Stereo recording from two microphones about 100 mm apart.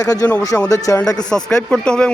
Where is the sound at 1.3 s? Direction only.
5° left (ahead or behind).